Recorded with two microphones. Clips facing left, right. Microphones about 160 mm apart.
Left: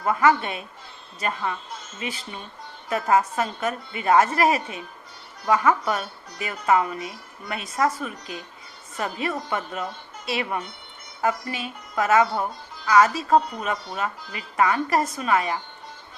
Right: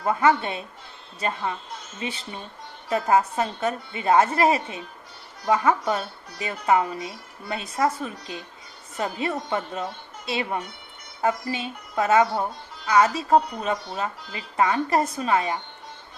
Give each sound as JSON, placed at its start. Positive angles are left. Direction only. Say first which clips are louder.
{"t": 0.0, "sound": "speech", "louder": "even", "side_deg": -30}